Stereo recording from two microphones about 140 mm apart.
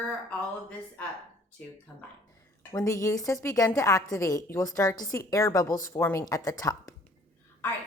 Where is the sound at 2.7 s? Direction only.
25° left (ahead or behind).